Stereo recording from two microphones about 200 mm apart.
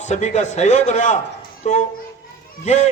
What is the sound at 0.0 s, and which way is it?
A man's voice, 35° left (ahead or behind).